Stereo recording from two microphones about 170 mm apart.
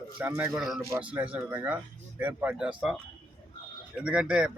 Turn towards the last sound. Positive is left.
turn(degrees=-5)  # may be behind; listen again after turning